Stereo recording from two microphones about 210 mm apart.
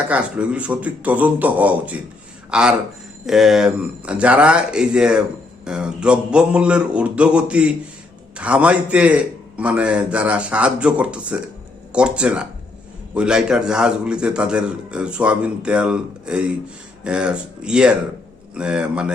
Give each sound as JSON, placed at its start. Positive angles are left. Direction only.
{"t": 0.1, "sound": "a man's voice", "side_deg": -5}